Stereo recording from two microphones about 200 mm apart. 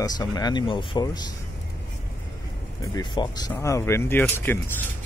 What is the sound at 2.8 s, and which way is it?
Speech, 20° left (ahead or behind).